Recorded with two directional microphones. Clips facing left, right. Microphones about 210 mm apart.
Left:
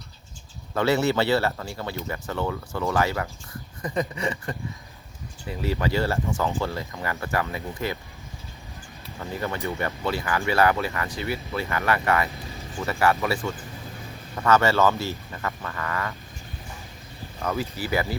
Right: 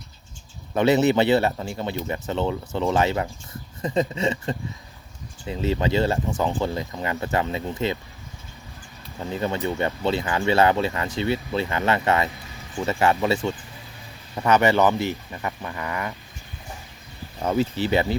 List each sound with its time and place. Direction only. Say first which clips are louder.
0.7 s speech: right 4 dB; 20° right (ahead or behind)
9.1 s speech: right 4 dB; 20° right (ahead or behind)
17.4 s speech: right 6 dB; 25° right (ahead or behind)